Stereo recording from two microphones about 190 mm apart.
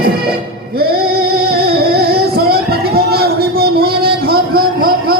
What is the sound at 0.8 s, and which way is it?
Music, 55° right (ahead or behind).